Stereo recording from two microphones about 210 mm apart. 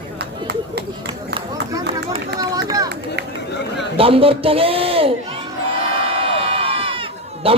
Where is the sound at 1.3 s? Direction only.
25° right (ahead or behind).